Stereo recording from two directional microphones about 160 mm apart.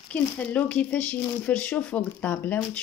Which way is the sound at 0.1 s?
10° left (ahead or behind).